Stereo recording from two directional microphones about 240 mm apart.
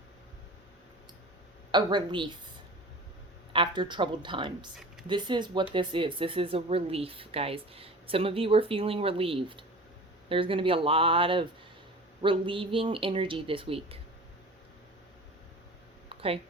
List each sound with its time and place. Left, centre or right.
1.7 s speech: centre
3.5 s speech: centre
16.0 s a sound: right